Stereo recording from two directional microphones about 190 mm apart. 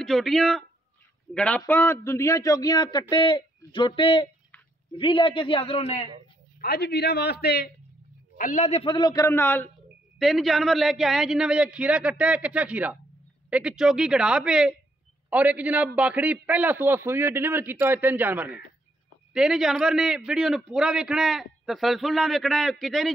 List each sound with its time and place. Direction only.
0.0 s a man's voice: centre (ahead or behind); by 6.0 s 30° left (ahead or behind)
6.6 s a man's voice: 55° left (ahead or behind)
8.4 s speech: 40° left (ahead or behind); by 9.7 s 10° left (ahead or behind)
10.1 s a man's voice: centre (ahead or behind)